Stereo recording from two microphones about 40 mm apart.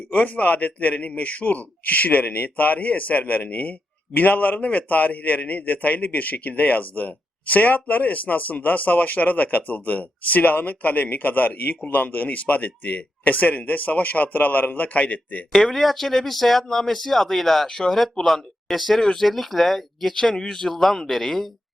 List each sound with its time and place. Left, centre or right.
0.1 s speech: left
15.5 s speech: centre